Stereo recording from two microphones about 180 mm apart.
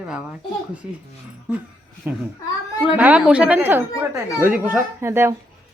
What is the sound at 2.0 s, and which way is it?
A woman's voice, 10° right (ahead or behind).